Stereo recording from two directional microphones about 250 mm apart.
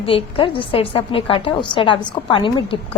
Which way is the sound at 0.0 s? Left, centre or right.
Left.